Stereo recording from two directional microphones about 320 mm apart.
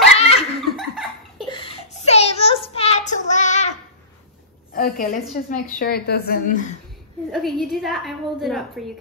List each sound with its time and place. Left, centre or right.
0.2 s laughter: centre
0.7 s cough: centre
1.5 s child singing: centre
4.7 s a woman's voice: left
7.2 s a woman's voice: centre